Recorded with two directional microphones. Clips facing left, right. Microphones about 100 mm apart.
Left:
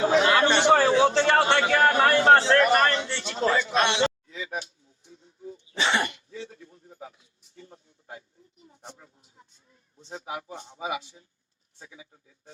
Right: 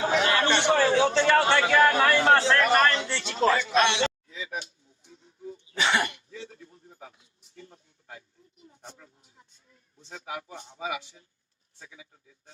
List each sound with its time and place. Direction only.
0.0 s chatter: 30° left (ahead or behind)
0.7 s a man's voice: 35° left (ahead or behind)
5.6 s cough: 25° left (ahead or behind)
7.5 s a sound: 25° left (ahead or behind)
10.0 s speech: 25° left (ahead or behind)